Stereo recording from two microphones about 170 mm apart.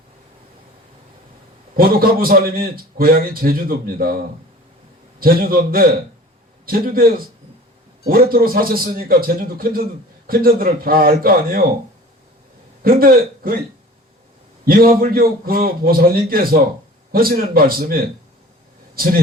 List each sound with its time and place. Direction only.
1.7 s a man's voice: 60° right (ahead or behind)
5.2 s a man's voice: 60° right (ahead or behind)
12.8 s a man's voice: 60° right (ahead or behind)
14.6 s a man's voice: 60° right (ahead or behind)